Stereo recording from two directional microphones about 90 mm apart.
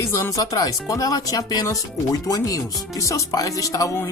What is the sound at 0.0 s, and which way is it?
Speech, 35° left (ahead or behind).